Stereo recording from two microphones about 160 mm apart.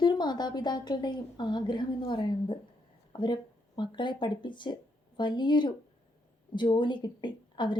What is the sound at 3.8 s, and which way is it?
A woman's voice, 30° left (ahead or behind).